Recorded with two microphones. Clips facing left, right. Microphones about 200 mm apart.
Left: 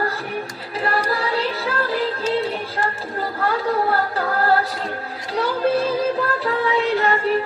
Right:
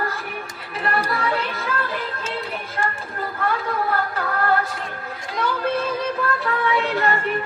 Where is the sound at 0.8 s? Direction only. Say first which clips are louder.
Left 2 dB; 35° left (ahead or behind).